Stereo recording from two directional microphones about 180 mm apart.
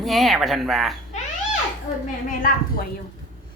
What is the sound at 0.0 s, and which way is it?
Speech, centre (ahead or behind).